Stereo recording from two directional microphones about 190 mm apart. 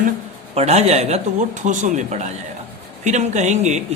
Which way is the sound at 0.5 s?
35° right (ahead or behind).